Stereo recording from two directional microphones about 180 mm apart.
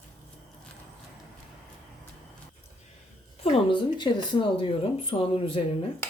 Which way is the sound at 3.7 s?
25° left (ahead or behind).